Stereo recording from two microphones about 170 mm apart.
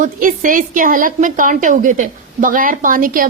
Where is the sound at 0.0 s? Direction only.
50° right (ahead or behind).